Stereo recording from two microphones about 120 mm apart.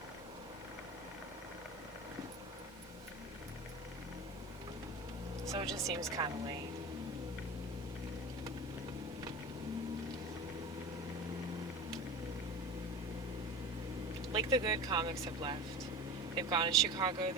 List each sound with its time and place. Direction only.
5.5 s speech: 30° right (ahead or behind)
14.3 s speech: 35° right (ahead or behind)
16.3 s speech: 40° right (ahead or behind)